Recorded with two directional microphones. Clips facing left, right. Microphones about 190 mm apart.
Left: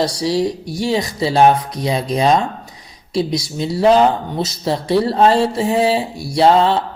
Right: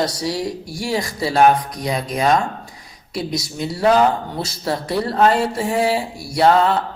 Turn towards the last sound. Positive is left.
turn(degrees=25)  # may be behind; listen again after turning